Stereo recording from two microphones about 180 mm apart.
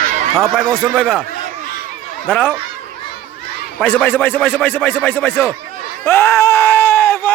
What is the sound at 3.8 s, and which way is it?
Speech, 10° left (ahead or behind).